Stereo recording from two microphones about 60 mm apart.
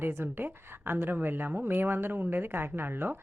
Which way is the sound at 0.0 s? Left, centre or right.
Right.